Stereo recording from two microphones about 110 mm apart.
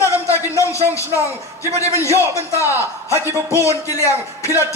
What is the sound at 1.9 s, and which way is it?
Speech, 25° left (ahead or behind).